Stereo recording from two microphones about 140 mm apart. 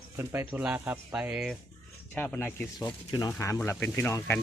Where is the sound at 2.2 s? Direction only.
10° left (ahead or behind).